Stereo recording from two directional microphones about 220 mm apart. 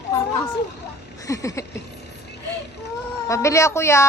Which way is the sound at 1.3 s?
15° left (ahead or behind).